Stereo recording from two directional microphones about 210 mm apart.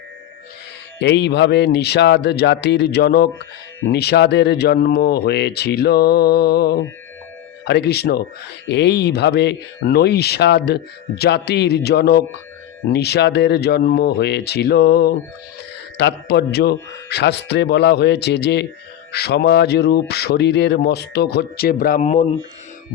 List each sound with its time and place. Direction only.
0.9 s speech: 55° left (ahead or behind); by 22.3 s 35° left (ahead or behind)